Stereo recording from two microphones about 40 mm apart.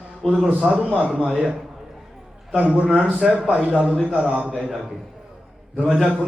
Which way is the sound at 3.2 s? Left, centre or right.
Centre.